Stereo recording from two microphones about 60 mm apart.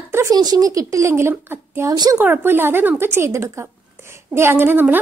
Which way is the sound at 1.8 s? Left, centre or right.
Right.